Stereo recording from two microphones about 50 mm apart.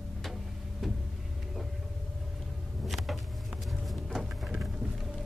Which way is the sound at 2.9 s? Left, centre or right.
Centre.